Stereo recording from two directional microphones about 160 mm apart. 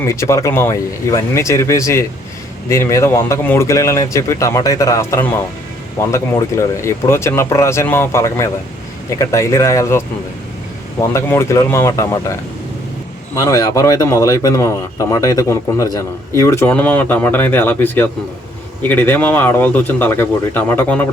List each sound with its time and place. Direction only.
0.0 s speech: 20° left (ahead or behind)
11.1 s speech: 20° left (ahead or behind)